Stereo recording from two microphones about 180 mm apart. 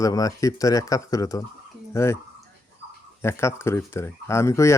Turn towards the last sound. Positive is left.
turn(degrees=15)  # may be behind; listen again after turning